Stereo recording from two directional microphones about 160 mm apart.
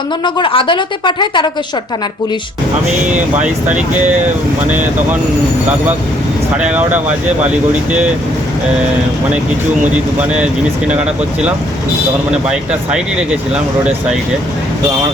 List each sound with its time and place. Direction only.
0.3 s a woman's voice: 30° left (ahead or behind)
3.3 s speech: 10° right (ahead or behind)
6.6 s speech: 10° right (ahead or behind)